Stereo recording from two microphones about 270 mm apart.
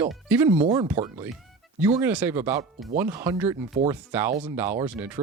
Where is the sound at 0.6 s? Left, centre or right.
Right.